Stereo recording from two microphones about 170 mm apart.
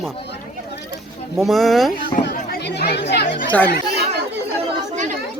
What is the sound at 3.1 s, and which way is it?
Chatter, 70° left (ahead or behind).